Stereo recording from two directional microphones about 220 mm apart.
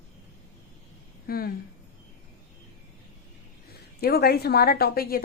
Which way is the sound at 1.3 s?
45° left (ahead or behind).